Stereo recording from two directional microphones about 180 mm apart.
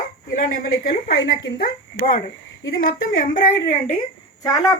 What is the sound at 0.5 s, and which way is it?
Speech, 50° left (ahead or behind).